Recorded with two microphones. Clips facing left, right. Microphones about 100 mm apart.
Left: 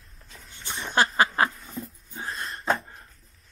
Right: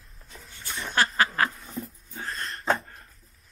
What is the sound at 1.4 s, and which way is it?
Cat, centre (ahead or behind).